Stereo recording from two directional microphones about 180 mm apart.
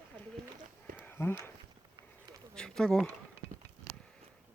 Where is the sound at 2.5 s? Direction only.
5° left (ahead or behind).